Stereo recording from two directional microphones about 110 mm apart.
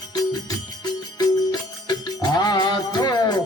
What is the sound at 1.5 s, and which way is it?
Music, 40° left (ahead or behind).